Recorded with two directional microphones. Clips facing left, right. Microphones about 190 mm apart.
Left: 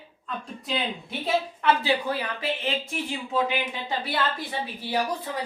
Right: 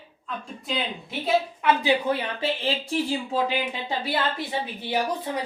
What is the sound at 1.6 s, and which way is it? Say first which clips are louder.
Speech: right 2 dB; 15° right (ahead or behind).